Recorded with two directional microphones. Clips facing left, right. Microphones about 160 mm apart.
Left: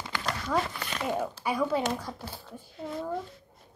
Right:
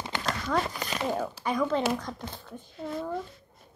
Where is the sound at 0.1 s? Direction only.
20° right (ahead or behind).